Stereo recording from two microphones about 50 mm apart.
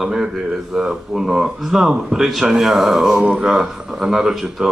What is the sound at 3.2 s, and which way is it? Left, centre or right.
Speech, right.